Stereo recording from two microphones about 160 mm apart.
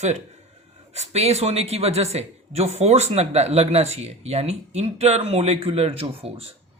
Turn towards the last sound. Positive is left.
turn(degrees=-40)  # may be behind; listen again after turning